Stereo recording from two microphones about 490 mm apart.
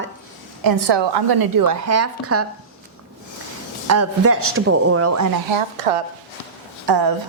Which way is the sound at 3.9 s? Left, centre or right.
Right.